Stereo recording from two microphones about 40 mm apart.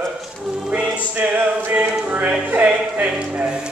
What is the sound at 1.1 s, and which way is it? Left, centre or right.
Choir, right.